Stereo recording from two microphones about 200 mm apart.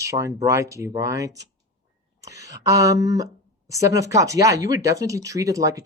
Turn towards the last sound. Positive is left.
turn(degrees=-15)  # may be behind; listen again after turning